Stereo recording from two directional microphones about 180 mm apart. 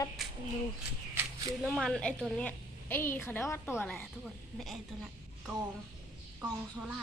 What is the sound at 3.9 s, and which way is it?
Speech, centre (ahead or behind).